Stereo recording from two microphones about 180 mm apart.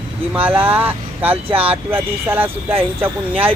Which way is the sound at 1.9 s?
10° right (ahead or behind).